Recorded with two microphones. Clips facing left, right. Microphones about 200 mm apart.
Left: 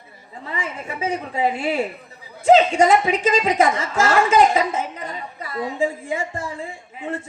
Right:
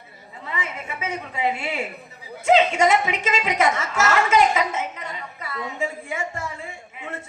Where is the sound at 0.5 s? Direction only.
35° left (ahead or behind).